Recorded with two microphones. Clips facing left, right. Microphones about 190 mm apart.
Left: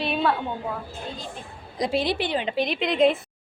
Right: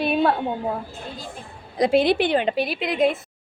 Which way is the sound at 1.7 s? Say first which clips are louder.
Right 7 dB; 60° right (ahead or behind).